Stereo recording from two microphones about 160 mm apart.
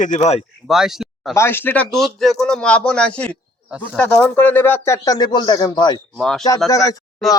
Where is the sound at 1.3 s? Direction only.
15° left (ahead or behind).